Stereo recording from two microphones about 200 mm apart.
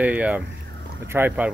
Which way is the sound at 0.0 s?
5° right (ahead or behind).